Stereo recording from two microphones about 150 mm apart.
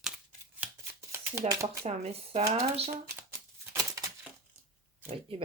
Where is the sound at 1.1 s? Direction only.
20° right (ahead or behind).